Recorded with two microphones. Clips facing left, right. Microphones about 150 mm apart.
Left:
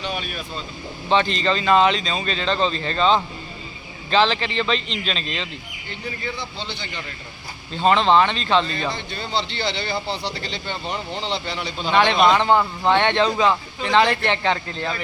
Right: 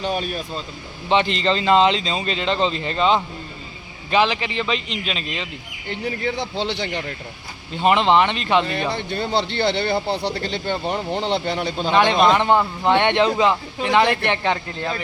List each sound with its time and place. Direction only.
0.0 s speech: 40° right (ahead or behind)
1.1 s a man's voice: 20° right (ahead or behind)
5.9 s a man's voice: 70° right (ahead or behind)
7.7 s a man's voice: 15° right (ahead or behind)
8.9 s speech: 55° right (ahead or behind)
11.9 s a man's voice: 20° right (ahead or behind)